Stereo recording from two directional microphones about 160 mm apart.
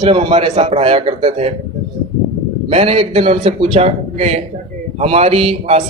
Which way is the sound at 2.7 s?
35° right (ahead or behind).